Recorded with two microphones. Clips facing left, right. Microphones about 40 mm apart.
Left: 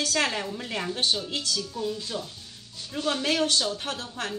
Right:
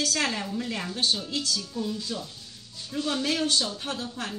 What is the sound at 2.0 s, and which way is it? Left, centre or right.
A woman's voice, left.